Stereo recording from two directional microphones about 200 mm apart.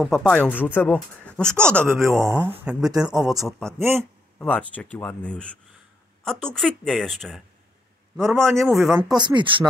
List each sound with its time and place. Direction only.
0.0 s speech: centre (ahead or behind)
2.0 s speech: 15° right (ahead or behind); by 7.4 s centre (ahead or behind)
8.2 s speech: 15° right (ahead or behind)
8.6 s speech: centre (ahead or behind)
9.1 s speech: 20° right (ahead or behind)